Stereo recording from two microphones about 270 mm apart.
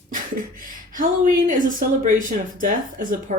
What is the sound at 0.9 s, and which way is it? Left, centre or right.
Speech, right.